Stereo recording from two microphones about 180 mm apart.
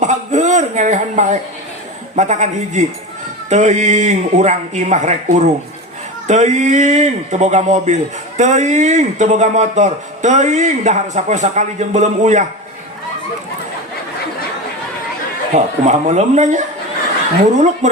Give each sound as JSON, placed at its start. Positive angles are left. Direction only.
{"t": 0.0, "sound": "a sound", "side_deg": -40}
{"t": 2.1, "sound": "a man's voice", "side_deg": -40}
{"t": 15.5, "sound": "a man's voice", "side_deg": -40}
{"t": 17.8, "sound": "a man's voice", "side_deg": -40}